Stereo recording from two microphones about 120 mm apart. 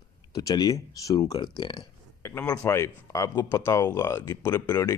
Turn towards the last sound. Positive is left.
turn(degrees=20)  # may be behind; listen again after turning